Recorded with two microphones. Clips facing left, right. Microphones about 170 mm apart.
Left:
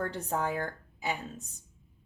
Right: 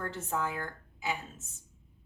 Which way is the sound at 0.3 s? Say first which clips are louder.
Left 2 dB; 40° left (ahead or behind).